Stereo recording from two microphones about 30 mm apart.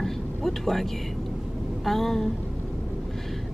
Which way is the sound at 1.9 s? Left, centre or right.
Centre.